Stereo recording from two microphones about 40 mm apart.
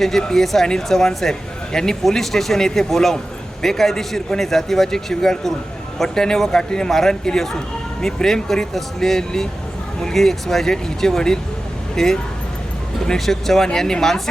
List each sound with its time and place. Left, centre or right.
0.2 s a man's voice: centre